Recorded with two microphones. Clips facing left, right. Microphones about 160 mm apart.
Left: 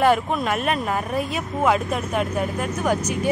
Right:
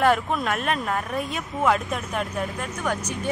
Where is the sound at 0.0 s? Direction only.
Centre (ahead or behind).